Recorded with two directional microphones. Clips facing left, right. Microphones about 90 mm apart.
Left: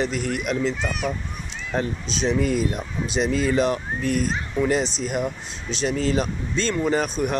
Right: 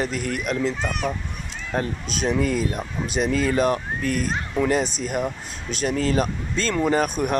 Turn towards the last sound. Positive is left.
turn(degrees=-45)  # may be behind; listen again after turning